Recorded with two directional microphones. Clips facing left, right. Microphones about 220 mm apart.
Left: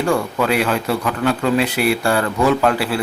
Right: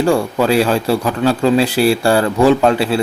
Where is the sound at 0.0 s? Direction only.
30° right (ahead or behind).